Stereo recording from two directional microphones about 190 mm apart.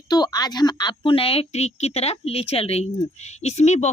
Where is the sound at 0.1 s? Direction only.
20° left (ahead or behind).